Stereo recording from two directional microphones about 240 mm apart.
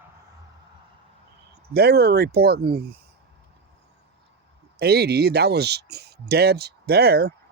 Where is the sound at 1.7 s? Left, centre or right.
Right.